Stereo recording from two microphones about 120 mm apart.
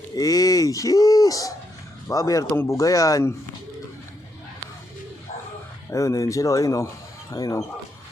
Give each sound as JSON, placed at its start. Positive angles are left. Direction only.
{"t": 0.2, "sound": "speech", "side_deg": 30}
{"t": 5.9, "sound": "speech", "side_deg": 25}